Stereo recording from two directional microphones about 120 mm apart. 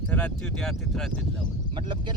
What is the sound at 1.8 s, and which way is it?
Speech, 40° right (ahead or behind).